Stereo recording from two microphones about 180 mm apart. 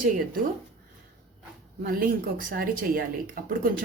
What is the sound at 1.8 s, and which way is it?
A woman's voice, 50° right (ahead or behind).